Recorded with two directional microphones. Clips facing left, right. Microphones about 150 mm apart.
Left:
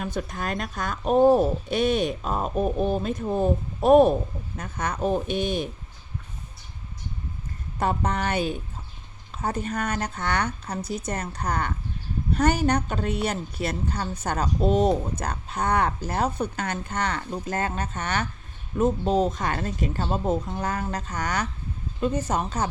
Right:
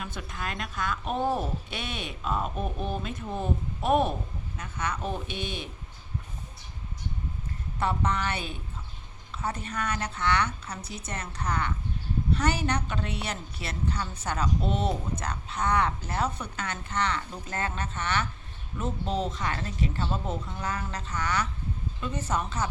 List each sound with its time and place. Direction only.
0.0 s a woman's voice: 40° left (ahead or behind)
7.8 s a woman's voice: 45° left (ahead or behind)